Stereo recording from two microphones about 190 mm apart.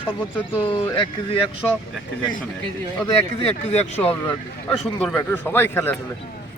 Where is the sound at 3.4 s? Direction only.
35° left (ahead or behind).